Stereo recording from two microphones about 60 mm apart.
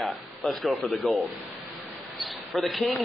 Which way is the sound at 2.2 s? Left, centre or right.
Centre.